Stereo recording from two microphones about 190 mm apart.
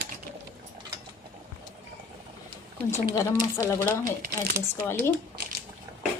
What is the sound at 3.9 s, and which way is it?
Speech, 50° right (ahead or behind).